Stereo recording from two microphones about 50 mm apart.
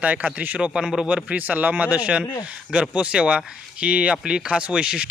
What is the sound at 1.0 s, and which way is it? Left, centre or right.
Speech, right.